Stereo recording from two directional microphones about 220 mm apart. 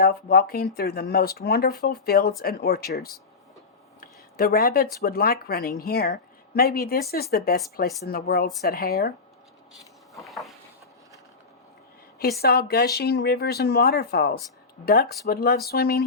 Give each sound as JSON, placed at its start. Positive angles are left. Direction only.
{"t": 0.0, "sound": "speech", "side_deg": 45}
{"t": 4.0, "sound": "speech", "side_deg": 40}
{"t": 10.2, "sound": "a sound", "side_deg": 0}
{"t": 12.4, "sound": "speech", "side_deg": 45}